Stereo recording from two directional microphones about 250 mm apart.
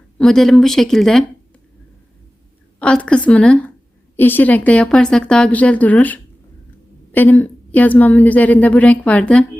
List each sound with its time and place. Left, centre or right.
0.2 s a woman's voice: centre
2.7 s a woman's voice: centre